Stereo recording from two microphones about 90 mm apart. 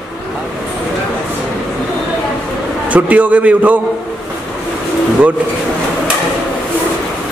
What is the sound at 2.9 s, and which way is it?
Speech, 20° right (ahead or behind).